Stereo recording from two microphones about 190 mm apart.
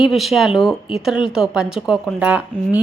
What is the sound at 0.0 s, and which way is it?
Speech, centre (ahead or behind).